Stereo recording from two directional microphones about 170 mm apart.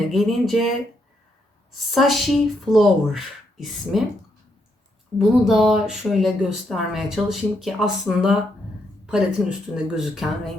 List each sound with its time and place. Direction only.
0.1 s speech: centre (ahead or behind)
2.0 s speech: centre (ahead or behind)
5.1 s speech: centre (ahead or behind)